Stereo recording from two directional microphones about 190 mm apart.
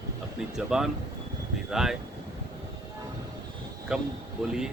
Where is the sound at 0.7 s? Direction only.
Centre (ahead or behind).